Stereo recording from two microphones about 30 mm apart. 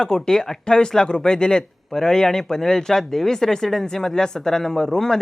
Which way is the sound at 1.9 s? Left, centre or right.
Centre.